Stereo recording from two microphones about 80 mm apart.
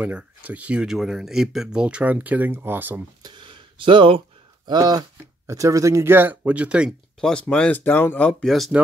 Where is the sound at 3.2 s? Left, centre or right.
Right.